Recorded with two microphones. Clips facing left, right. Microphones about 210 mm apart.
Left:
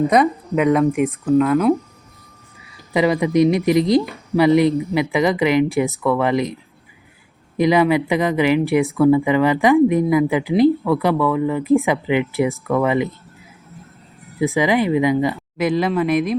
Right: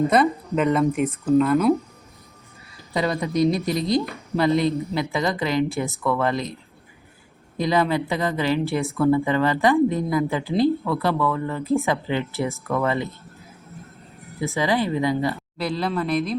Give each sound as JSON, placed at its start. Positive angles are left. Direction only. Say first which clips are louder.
{"t": 0.7, "sound": "speech", "louder": "left 5 dB", "side_deg": 10}
{"t": 1.0, "sound": "speech", "louder": "left 2 dB", "side_deg": 0}
{"t": 2.9, "sound": "speech", "louder": "left 7 dB", "side_deg": 15}
{"t": 14.3, "sound": "speech", "louder": "left 5 dB", "side_deg": 15}